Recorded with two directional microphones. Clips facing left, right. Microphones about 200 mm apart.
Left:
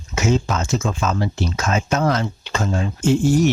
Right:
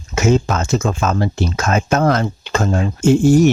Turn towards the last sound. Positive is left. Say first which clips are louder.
# right 5 dB
turn(degrees=-45)  # may be behind; listen again after turning